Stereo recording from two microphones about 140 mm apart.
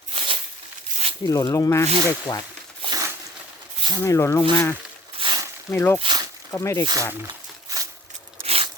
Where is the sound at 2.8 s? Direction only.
25° right (ahead or behind).